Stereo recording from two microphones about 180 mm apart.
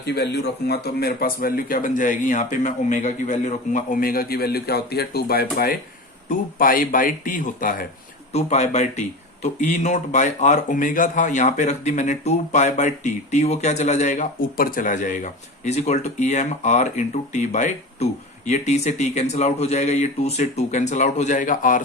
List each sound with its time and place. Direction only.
0.0 s speech: 65° left (ahead or behind); by 7.9 s 50° left (ahead or behind)
8.3 s speech: 35° left (ahead or behind)